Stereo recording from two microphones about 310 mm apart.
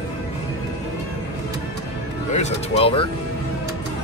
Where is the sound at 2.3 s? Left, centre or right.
Left.